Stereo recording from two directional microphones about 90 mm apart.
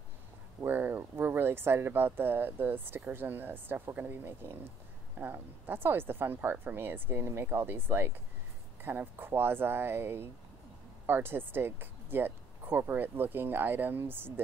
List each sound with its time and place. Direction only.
0.6 s speech: 20° right (ahead or behind)